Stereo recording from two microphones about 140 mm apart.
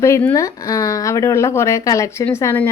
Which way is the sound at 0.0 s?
15° left (ahead or behind).